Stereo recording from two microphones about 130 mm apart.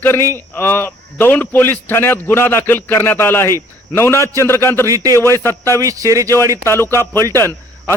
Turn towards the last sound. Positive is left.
turn(degrees=20)  # may be behind; listen again after turning